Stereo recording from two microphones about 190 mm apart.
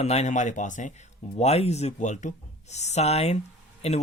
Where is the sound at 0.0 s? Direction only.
35° left (ahead or behind).